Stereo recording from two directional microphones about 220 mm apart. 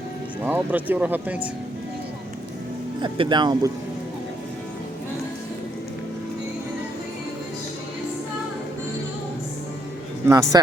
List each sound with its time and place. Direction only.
0.4 s speech: 5° right (ahead or behind)
3.0 s speech: 20° right (ahead or behind)
10.2 s speech: 15° right (ahead or behind)